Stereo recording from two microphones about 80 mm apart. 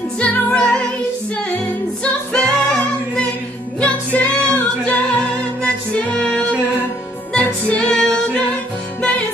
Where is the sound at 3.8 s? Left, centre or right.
Left.